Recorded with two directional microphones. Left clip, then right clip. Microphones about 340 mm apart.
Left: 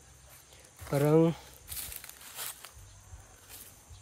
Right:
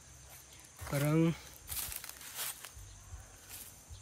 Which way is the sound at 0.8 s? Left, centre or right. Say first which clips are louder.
Left 8 dB; centre.